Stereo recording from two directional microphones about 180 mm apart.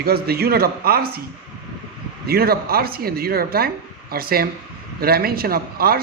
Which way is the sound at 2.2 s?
60° right (ahead or behind).